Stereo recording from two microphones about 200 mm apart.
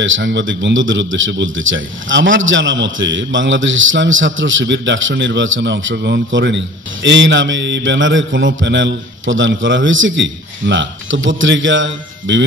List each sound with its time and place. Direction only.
0.0 s a man's voice: 70° right (ahead or behind)